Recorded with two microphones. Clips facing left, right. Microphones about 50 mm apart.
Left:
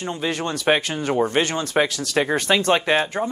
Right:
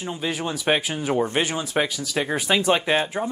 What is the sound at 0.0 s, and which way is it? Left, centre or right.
Speech, centre.